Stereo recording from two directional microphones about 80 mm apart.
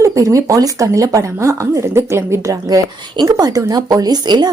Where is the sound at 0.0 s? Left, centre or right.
Right.